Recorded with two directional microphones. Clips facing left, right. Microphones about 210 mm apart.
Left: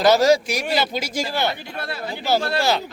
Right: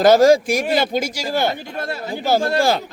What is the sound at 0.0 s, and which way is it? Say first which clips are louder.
Speech: right 4 dB; 50° right (ahead or behind).